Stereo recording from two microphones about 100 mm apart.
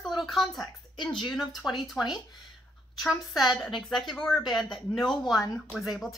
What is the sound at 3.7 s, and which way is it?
Speech, 50° left (ahead or behind).